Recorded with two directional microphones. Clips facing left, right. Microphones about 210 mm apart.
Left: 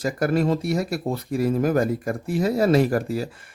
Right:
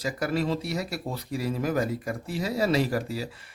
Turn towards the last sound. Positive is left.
turn(degrees=50)  # may be behind; listen again after turning